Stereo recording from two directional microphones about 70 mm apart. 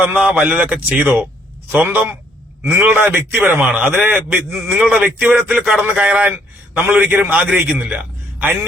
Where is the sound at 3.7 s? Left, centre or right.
Centre.